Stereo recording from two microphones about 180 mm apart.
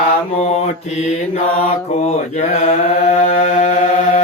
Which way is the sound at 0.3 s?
35° left (ahead or behind).